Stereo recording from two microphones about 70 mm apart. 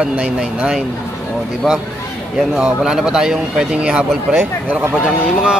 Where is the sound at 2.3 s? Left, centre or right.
Centre.